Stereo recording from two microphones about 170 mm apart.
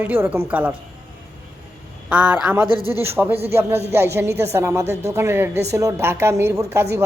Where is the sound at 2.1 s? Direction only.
5° right (ahead or behind).